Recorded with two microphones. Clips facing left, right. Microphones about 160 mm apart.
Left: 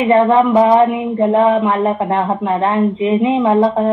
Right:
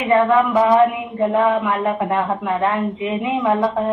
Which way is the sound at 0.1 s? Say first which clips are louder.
Left 3 dB; 30° left (ahead or behind).